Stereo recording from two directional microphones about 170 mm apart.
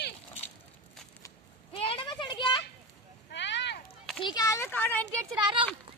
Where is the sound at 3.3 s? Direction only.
90° left.